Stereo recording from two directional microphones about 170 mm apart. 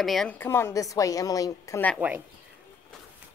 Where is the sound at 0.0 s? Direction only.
Centre (ahead or behind); by 1.8 s 20° left (ahead or behind).